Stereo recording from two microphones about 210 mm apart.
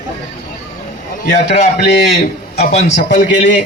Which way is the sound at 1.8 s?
50° left (ahead or behind).